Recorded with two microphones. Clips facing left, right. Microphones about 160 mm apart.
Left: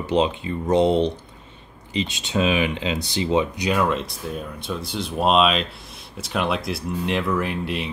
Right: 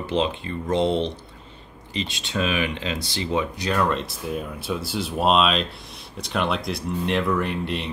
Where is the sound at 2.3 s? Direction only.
20° left (ahead or behind).